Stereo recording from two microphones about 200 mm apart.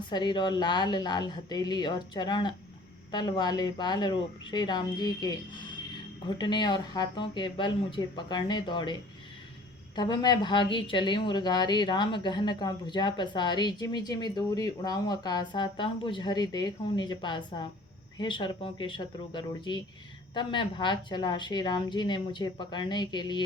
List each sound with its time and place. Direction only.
0.1 s speech: 20° left (ahead or behind)